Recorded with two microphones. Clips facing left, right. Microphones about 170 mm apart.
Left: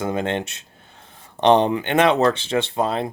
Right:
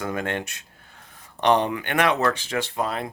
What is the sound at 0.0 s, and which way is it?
Speech, 25° left (ahead or behind).